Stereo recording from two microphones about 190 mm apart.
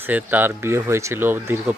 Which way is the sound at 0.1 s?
10° right (ahead or behind).